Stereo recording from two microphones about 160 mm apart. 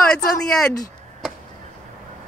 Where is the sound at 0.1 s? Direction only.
5° left (ahead or behind).